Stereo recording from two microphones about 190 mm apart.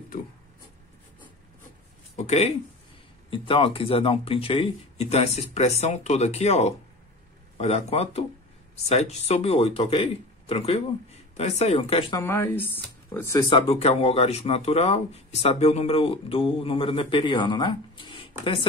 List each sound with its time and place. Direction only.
2.1 s speech: 35° left (ahead or behind)
12.2 s speech: 10° left (ahead or behind)
13.5 s speech: 30° left (ahead or behind)